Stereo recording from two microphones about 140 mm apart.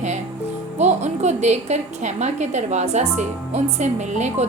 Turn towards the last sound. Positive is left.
turn(degrees=-55)  # may be behind; listen again after turning